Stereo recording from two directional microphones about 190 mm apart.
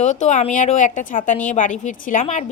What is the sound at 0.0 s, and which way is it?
A woman's voice, 40° left (ahead or behind).